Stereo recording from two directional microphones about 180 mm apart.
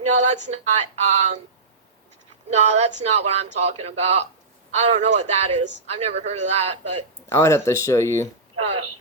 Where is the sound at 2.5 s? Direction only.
40° right (ahead or behind).